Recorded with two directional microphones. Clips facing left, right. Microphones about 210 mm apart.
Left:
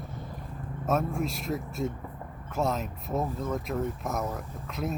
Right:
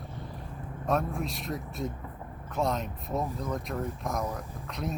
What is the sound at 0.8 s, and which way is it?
Speech, centre (ahead or behind).